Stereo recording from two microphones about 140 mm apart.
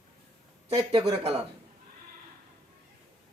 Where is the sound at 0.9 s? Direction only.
35° right (ahead or behind).